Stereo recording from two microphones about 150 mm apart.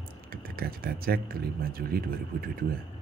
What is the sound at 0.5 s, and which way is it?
Speech, 80° right.